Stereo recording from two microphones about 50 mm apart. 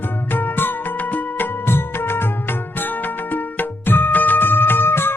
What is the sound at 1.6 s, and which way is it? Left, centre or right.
Music, left.